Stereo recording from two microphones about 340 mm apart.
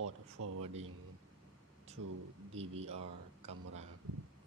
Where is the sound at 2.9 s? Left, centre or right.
Right.